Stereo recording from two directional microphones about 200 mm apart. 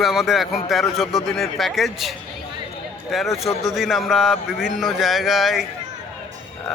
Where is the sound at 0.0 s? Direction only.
Centre (ahead or behind).